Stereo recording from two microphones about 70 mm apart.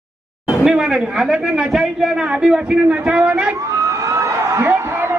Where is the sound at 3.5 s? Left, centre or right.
Right.